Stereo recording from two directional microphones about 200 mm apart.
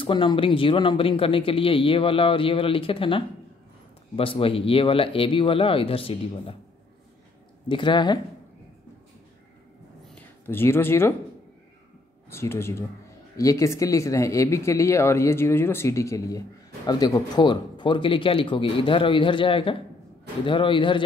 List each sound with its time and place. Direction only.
0.0 s speech: 25° left (ahead or behind)
7.6 s speech: 25° left (ahead or behind)
10.1 s speech: 10° left (ahead or behind)
12.3 s speech: 10° left (ahead or behind)